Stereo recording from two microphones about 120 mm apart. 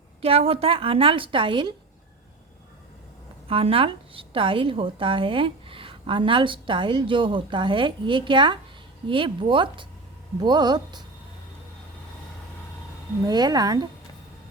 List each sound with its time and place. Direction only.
0.2 s speech: 50° right (ahead or behind)
3.5 s speech: 50° right (ahead or behind)
13.2 s speech: 35° right (ahead or behind)